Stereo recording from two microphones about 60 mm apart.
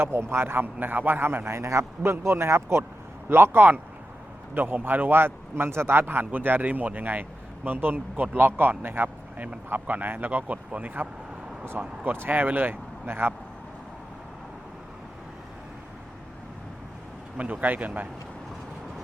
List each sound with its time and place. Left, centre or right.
0.0 s speech: right
12.1 s speech: right
17.3 s speech: right